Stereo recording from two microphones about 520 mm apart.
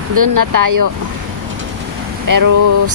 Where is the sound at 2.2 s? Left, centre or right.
Right.